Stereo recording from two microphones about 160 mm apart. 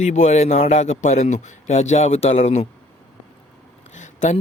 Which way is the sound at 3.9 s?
50° left (ahead or behind).